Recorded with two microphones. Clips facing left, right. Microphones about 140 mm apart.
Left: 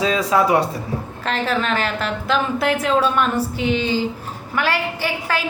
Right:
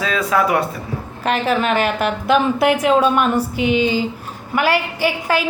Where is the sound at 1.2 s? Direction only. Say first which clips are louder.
Right 4 dB; 10° right (ahead or behind).